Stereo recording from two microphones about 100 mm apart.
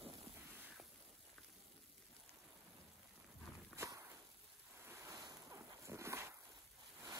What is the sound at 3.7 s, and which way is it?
Walk, 30° right (ahead or behind).